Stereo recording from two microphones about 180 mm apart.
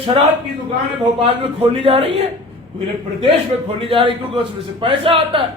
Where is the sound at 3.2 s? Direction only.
30° right (ahead or behind).